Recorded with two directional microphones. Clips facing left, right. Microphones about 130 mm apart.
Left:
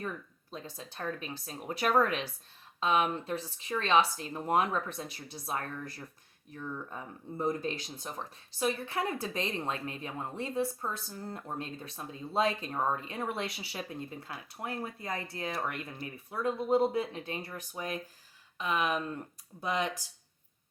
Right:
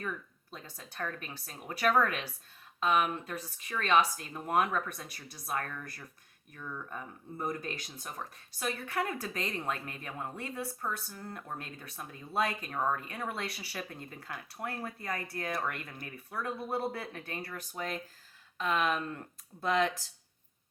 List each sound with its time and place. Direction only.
0.5 s speech: 20° left (ahead or behind)